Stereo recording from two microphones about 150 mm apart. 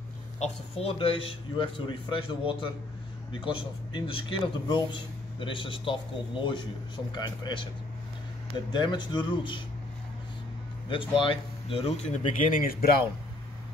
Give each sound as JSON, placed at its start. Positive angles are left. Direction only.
{"t": 0.4, "sound": "speech", "side_deg": 40}
{"t": 8.7, "sound": "speech", "side_deg": 30}
{"t": 10.9, "sound": "speech", "side_deg": 35}
{"t": 12.4, "sound": "speech", "side_deg": 70}